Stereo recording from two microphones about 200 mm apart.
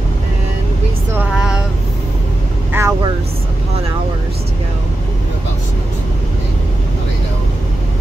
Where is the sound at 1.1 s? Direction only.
5° right (ahead or behind).